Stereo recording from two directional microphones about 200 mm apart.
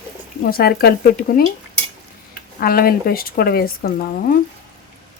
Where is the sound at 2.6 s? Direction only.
45° left (ahead or behind).